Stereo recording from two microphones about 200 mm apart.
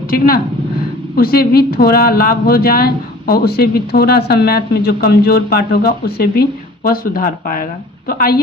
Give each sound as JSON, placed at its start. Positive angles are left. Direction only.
{"t": 1.1, "sound": "a woman's voice", "side_deg": 50}